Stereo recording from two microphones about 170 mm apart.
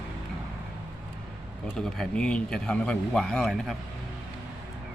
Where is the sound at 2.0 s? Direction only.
5° left (ahead or behind).